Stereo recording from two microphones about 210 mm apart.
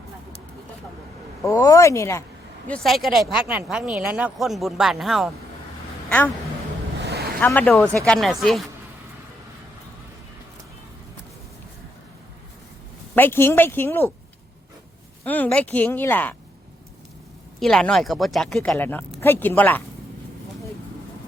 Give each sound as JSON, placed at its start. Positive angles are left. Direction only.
{"t": 1.5, "sound": "speech", "side_deg": 15}
{"t": 2.6, "sound": "speech", "side_deg": 5}
{"t": 7.0, "sound": "a sound", "side_deg": -50}
{"t": 7.3, "sound": "speech", "side_deg": 5}
{"t": 13.1, "sound": "speech", "side_deg": 10}
{"t": 15.2, "sound": "speech", "side_deg": 10}
{"t": 17.6, "sound": "speech", "side_deg": 5}